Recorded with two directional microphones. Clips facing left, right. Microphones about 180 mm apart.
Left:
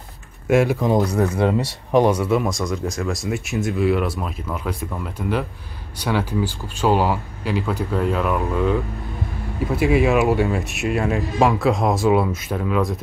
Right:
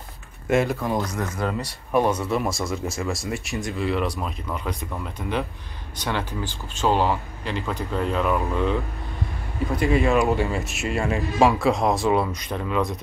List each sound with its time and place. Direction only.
0.5 s speech: 5° left (ahead or behind)
0.9 s speech: 35° left (ahead or behind)
1.9 s speech: 15° left (ahead or behind)